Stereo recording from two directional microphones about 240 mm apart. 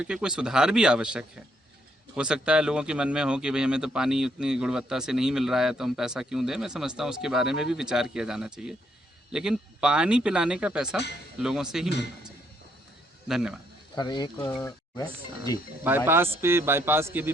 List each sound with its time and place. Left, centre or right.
0.0 s speech: centre
13.2 s speech: centre
13.9 s speech: centre
15.8 s a man's voice: centre